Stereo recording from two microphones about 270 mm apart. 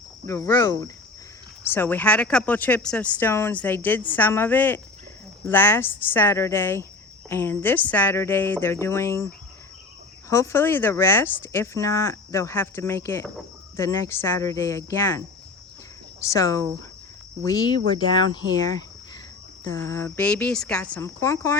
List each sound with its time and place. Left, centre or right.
0.3 s speech: centre
16.2 s speech: centre